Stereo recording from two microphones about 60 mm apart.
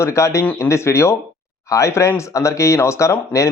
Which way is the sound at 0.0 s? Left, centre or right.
Left.